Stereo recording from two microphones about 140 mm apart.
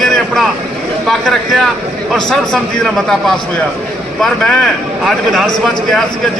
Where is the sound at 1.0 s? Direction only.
Centre (ahead or behind).